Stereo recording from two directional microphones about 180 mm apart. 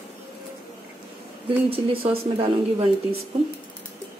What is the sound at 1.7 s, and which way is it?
Speech, 30° right (ahead or behind).